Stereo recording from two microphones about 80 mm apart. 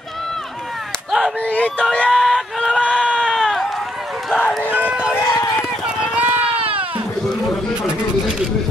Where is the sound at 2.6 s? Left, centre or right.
Centre.